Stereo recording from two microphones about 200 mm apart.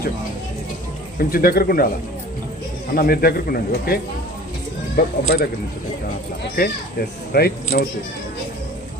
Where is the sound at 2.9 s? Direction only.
50° left (ahead or behind).